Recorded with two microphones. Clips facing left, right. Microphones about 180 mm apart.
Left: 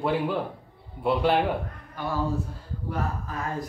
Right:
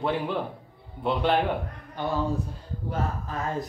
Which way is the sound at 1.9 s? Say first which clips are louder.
Right 2 dB; 20° right (ahead or behind).